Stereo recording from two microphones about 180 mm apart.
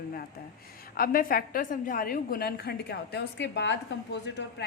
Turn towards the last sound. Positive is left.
turn(degrees=70)  # may be behind; listen again after turning